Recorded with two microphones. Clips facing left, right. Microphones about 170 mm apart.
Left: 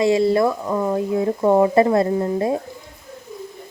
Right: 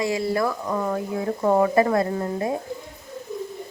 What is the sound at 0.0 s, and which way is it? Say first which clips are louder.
A woman's voice: left 7 dB; 25° left (ahead or behind).